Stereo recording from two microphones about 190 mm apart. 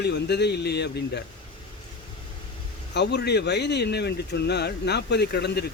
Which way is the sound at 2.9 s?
60° left (ahead or behind).